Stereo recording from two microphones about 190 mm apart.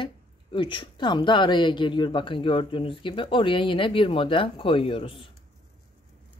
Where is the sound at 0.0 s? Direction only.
25° left (ahead or behind).